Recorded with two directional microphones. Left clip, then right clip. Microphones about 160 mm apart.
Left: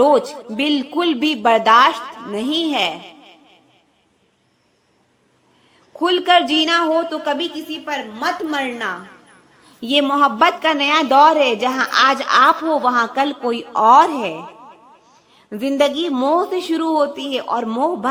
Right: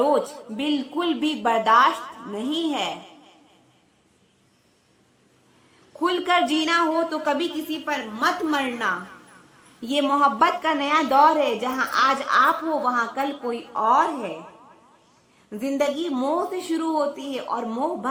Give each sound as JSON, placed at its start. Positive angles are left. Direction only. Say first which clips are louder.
{"t": 0.0, "sound": "a woman's voice", "louder": "left 7 dB", "side_deg": 35}
{"t": 6.0, "sound": "a man's voice", "louder": "left 7 dB", "side_deg": 25}
{"t": 9.8, "sound": "a woman's voice", "louder": "left 5 dB", "side_deg": 20}
{"t": 15.4, "sound": "a woman's voice", "louder": "left 7 dB", "side_deg": 30}